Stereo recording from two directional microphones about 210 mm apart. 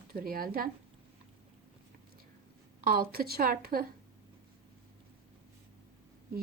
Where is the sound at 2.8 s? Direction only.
45° right (ahead or behind).